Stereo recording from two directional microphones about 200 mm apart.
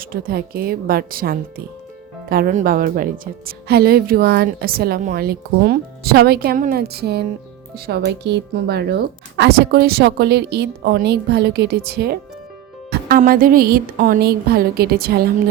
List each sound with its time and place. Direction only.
0.0 s speech: 45° right (ahead or behind)